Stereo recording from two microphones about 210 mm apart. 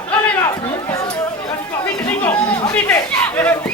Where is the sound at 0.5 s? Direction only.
15° left (ahead or behind).